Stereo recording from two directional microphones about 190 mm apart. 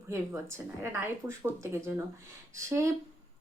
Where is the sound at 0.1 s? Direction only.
15° right (ahead or behind).